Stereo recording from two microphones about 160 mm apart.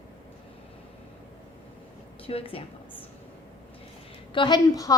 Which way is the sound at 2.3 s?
35° left (ahead or behind).